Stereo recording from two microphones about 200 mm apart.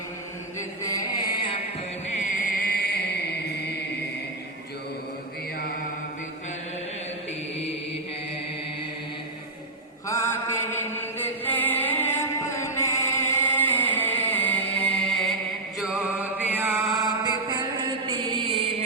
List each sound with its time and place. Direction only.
0.8 s chant: 15° left (ahead or behind)
2.1 s chant: 40° left (ahead or behind)
10.1 s chant: 10° left (ahead or behind)
15.8 s mantra: 5° right (ahead or behind)
17.0 s mantra: 20° right (ahead or behind)